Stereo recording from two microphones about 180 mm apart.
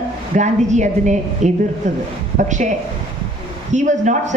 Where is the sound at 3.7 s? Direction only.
45° right (ahead or behind).